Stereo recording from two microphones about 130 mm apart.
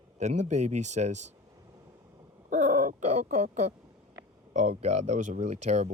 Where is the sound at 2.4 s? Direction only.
80° right; by 5.9 s 60° right (ahead or behind).